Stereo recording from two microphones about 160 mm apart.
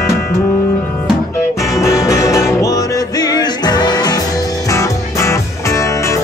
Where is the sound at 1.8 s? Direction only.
20° left (ahead or behind).